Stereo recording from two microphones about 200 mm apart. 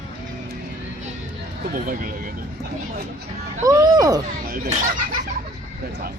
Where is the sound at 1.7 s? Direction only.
45° right (ahead or behind).